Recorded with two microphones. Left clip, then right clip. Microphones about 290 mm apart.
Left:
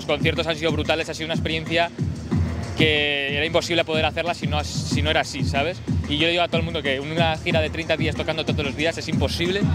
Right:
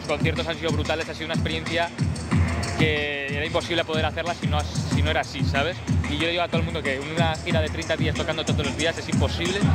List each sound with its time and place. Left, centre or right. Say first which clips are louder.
0.1 s speech: left 4 dB; left
5.4 s speech: left 1 dB; left
6.1 s speech: left 4 dB; left